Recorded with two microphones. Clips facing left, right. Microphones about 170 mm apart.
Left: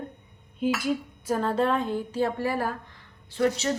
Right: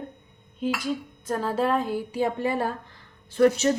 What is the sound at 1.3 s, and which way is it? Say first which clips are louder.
A woman's voice: even; 5° right (ahead or behind).